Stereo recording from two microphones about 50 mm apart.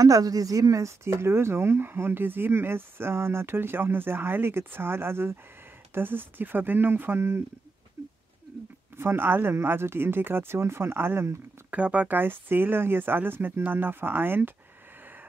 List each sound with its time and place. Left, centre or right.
0.7 s speech: right
5.9 s speech: right
8.0 s a sound: right
8.9 s speech: right
11.7 s speech: right
12.2 s speech: right